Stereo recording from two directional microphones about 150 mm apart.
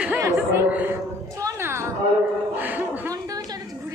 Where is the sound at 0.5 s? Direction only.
15° right (ahead or behind).